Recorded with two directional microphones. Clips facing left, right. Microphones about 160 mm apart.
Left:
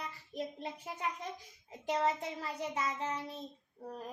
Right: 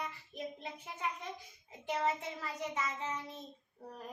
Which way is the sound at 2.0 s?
35° left (ahead or behind).